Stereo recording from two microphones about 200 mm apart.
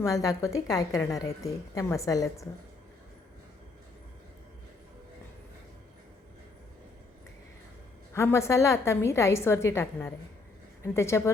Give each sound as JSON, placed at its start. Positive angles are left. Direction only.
{"t": 0.0, "sound": "a woman's voice", "side_deg": 15}
{"t": 8.1, "sound": "a woman's voice", "side_deg": 15}